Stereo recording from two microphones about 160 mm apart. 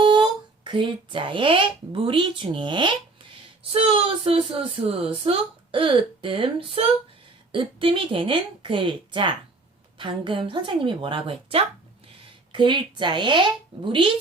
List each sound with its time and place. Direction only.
0.0 s a woman's voice: 30° right (ahead or behind)